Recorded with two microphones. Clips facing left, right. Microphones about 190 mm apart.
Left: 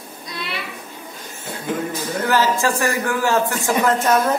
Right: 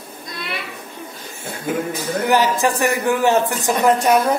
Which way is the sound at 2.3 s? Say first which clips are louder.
Right 1 dB; 20° right (ahead or behind).